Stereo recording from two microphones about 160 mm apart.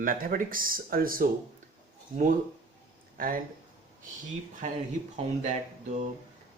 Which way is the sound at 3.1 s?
60° right (ahead or behind).